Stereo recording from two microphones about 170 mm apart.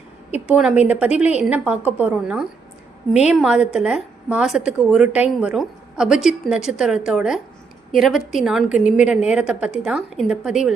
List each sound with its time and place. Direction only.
0.3 s a woman's voice: 10° right (ahead or behind)
1.1 s a woman's voice: 40° left (ahead or behind)
1.4 s a woman's voice: 10° right (ahead or behind)